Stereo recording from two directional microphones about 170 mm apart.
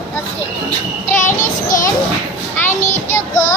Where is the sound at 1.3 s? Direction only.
50° left (ahead or behind).